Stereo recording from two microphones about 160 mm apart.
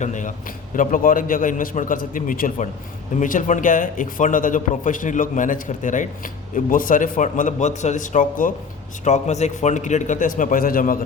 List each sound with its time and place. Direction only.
0.0 s a man's voice: 50° left (ahead or behind)